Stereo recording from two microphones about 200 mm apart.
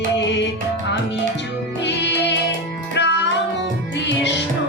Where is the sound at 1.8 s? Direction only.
60° left (ahead or behind).